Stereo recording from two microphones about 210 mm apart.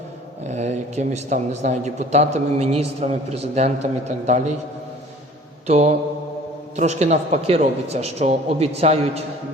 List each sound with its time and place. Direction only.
0.4 s a man's voice: 35° right (ahead or behind)
5.6 s a man's voice: 30° right (ahead or behind)